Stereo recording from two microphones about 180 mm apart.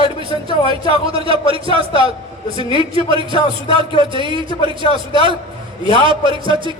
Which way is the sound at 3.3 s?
30° left (ahead or behind).